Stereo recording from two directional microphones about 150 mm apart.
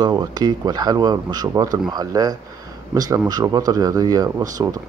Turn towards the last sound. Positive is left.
turn(degrees=-25)  # may be behind; listen again after turning